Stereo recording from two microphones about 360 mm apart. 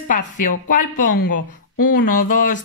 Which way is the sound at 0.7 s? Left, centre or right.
Left.